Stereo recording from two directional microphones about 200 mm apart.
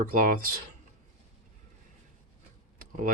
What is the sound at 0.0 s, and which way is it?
Speech, 45° right (ahead or behind).